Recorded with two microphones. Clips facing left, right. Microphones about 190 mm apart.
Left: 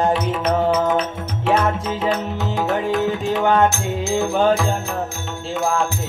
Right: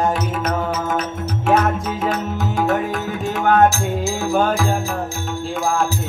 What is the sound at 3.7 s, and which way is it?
Music, 60° left (ahead or behind).